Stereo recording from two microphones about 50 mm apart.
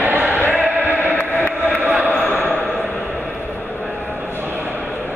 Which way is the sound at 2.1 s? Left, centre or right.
Left.